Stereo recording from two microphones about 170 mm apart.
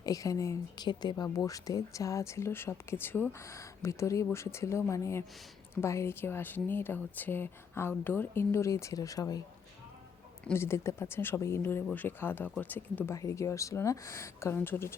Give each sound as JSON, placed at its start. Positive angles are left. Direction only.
{"t": 0.0, "sound": "speech", "side_deg": 20}
{"t": 10.4, "sound": "speech", "side_deg": 15}